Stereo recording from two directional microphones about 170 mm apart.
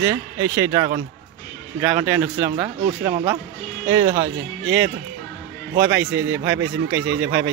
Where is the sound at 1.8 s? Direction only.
10° right (ahead or behind).